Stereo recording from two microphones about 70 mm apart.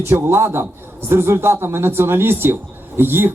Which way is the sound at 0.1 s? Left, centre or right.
Right.